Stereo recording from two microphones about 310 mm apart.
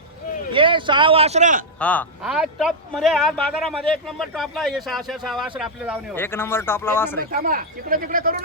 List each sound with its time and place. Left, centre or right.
0.5 s a man's voice: centre
1.8 s a man's voice: centre
7.2 s speech: right